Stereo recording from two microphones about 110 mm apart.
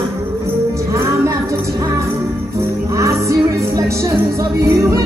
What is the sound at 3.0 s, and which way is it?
Music, 25° right (ahead or behind).